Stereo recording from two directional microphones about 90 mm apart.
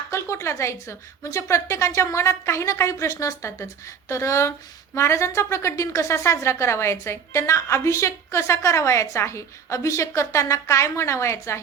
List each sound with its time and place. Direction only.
0.1 s a woman's voice: 30° left (ahead or behind)